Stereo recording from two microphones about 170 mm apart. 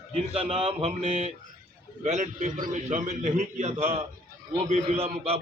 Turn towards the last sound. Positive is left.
turn(degrees=-35)  # may be behind; listen again after turning